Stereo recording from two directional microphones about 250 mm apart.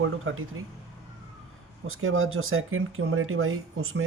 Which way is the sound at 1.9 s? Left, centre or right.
Right.